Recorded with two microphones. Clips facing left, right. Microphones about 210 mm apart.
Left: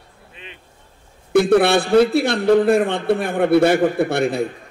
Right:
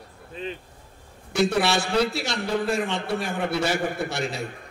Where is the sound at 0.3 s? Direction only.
35° right (ahead or behind).